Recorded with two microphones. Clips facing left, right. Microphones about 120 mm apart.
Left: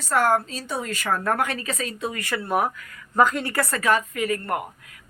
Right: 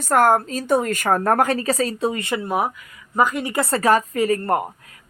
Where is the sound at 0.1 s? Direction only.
45° right (ahead or behind); by 3.8 s 20° right (ahead or behind).